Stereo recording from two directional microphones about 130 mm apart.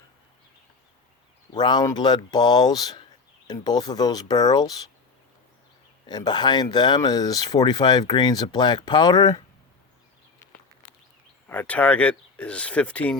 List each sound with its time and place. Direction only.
1.5 s speech: 35° left (ahead or behind)
6.1 s speech: 35° left (ahead or behind)
11.4 s speech: 10° left (ahead or behind)